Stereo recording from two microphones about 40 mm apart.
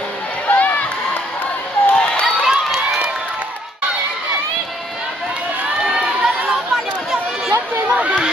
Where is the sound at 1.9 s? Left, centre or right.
Left.